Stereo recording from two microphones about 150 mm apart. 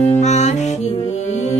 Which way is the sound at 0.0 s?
50° left (ahead or behind).